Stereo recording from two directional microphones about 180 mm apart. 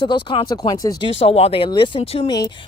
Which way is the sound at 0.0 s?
25° left (ahead or behind).